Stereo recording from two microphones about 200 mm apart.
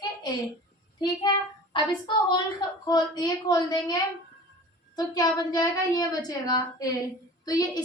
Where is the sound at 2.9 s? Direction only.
20° left (ahead or behind).